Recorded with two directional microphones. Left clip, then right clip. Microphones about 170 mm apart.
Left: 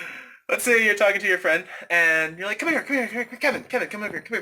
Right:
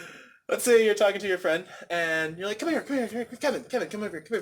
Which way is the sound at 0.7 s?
30° right (ahead or behind).